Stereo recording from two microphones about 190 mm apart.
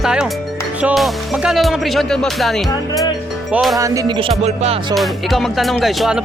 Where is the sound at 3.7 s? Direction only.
15° right (ahead or behind); by 4.7 s 35° right (ahead or behind).